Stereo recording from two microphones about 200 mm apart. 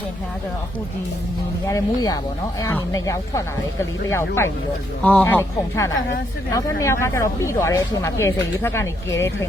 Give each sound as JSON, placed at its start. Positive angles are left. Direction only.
{"t": 1.6, "sound": "speech", "side_deg": 15}